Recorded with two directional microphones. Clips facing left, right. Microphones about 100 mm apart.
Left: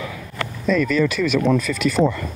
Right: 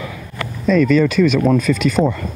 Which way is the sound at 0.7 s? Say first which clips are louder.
Right 5 dB; 35° right (ahead or behind).